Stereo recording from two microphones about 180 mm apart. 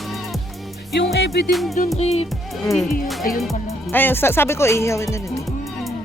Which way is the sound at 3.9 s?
10° left (ahead or behind).